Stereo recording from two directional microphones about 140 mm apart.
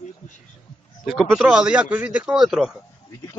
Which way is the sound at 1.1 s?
Centre (ahead or behind).